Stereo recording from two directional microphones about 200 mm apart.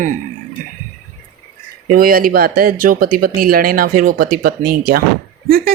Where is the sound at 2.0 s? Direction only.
45° right (ahead or behind).